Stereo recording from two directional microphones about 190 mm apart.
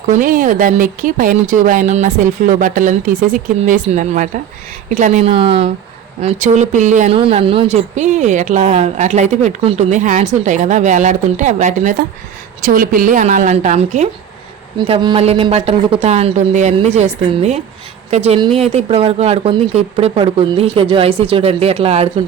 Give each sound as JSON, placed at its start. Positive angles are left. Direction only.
{"t": 0.1, "sound": "a woman's voice", "side_deg": -45}
{"t": 14.8, "sound": "a woman's voice", "side_deg": -25}